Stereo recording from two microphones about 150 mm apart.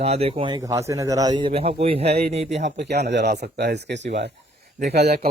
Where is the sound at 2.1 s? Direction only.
90° right.